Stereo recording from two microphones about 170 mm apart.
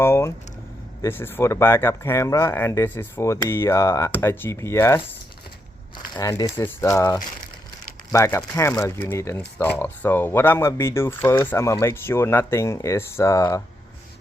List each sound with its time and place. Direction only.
0.0 s vehicle: 15° left (ahead or behind)
1.0 s speech: 15° left (ahead or behind)
6.1 s speech: 20° left (ahead or behind)